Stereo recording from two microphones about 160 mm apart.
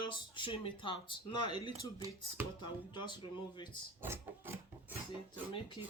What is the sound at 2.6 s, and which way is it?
Speech, 30° left (ahead or behind).